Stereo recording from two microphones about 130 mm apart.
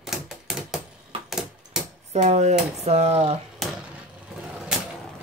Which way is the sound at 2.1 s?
60° right (ahead or behind).